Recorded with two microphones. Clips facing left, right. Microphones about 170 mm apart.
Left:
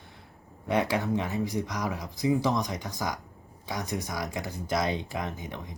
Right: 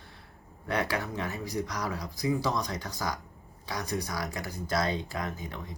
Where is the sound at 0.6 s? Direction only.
20° left (ahead or behind).